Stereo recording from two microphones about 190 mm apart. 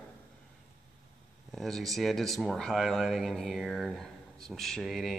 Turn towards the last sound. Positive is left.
turn(degrees=0)  # may be behind; listen again after turning